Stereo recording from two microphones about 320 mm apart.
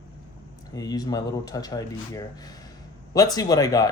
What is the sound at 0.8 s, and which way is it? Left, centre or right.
Speech, centre.